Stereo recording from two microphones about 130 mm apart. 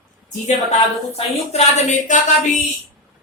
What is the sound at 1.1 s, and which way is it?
Speech, 55° left (ahead or behind).